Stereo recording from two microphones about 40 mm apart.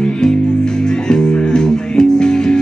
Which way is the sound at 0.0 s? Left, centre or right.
Centre.